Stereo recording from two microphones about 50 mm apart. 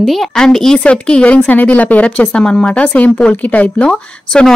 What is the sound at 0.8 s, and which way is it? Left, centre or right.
Speech, left.